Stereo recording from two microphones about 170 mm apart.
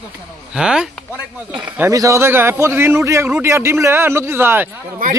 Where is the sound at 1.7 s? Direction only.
15° right (ahead or behind).